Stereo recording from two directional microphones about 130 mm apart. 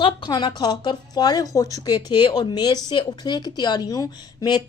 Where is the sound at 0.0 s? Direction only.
35° left (ahead or behind).